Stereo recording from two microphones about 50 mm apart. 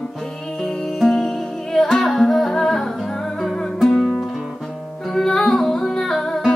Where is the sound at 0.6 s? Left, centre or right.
Centre.